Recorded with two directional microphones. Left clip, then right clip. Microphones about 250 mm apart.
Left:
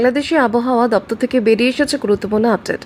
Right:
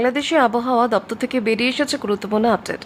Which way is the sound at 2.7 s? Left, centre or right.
Centre.